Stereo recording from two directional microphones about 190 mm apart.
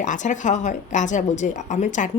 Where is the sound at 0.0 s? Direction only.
40° left (ahead or behind).